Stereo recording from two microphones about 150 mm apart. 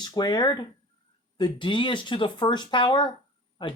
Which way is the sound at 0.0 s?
30° left (ahead or behind).